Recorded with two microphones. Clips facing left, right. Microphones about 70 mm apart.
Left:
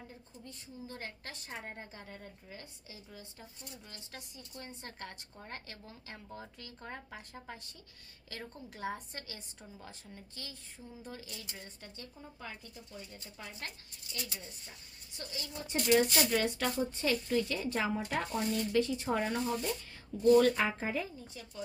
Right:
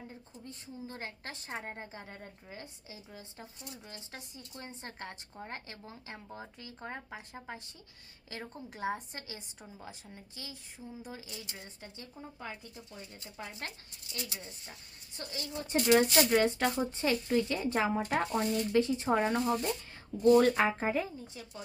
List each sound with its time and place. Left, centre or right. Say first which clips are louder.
0.4 s a woman's voice: right 3 dB; right
13.2 s speech: right 7 dB; right
15.2 s a woman's voice: right 3 dB; right
18.8 s a woman's voice: right 4 dB; right